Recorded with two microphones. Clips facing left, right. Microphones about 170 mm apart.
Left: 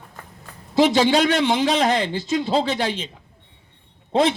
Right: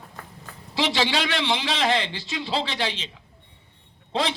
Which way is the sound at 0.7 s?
50° left (ahead or behind).